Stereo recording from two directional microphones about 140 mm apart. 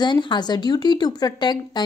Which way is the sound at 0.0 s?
30° left (ahead or behind).